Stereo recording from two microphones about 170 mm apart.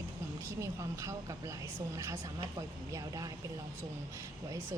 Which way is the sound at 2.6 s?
20° right (ahead or behind).